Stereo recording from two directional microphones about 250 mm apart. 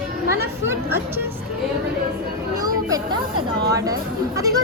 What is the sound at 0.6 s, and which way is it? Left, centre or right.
Speech, centre.